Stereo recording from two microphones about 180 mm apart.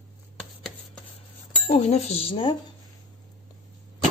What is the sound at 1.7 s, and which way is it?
Speech, 35° left (ahead or behind).